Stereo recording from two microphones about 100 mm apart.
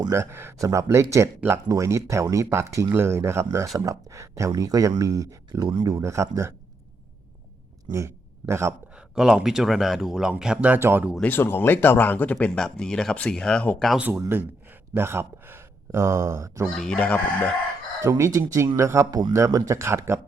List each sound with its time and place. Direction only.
0.1 s speech: 25° right (ahead or behind)
5.5 s speech: 50° right (ahead or behind); by 6.5 s 30° right (ahead or behind)
7.9 s speech: 30° right (ahead or behind)
9.0 s speech: 5° right (ahead or behind); by 11.0 s 20° right (ahead or behind)
11.2 s speech: 20° left (ahead or behind)
14.2 s speech: 20° right (ahead or behind)
16.6 s speech: 5° left (ahead or behind)
18.0 s speech: 35° right (ahead or behind)